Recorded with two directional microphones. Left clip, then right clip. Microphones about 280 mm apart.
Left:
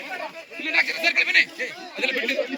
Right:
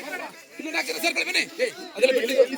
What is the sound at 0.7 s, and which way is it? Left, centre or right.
Speech, right.